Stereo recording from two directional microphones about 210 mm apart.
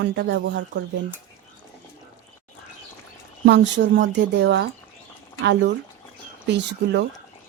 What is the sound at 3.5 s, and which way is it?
Speech, 55° right (ahead or behind).